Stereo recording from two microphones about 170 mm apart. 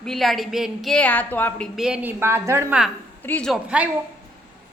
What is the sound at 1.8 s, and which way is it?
A woman's voice, 5° right (ahead or behind).